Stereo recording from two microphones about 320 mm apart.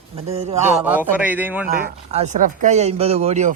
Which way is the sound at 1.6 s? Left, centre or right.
Right.